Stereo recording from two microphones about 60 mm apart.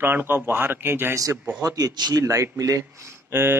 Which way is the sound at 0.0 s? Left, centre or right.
Right.